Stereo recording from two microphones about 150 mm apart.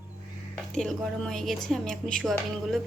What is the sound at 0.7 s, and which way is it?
Speech, 5° left (ahead or behind).